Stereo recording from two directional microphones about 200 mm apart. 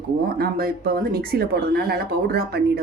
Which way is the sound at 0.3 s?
50° right (ahead or behind).